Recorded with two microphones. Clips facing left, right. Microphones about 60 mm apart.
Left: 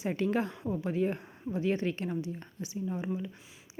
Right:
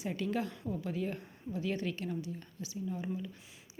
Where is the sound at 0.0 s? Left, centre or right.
Left.